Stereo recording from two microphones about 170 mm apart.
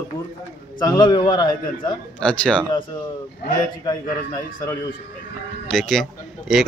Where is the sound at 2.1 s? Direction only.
5° left (ahead or behind).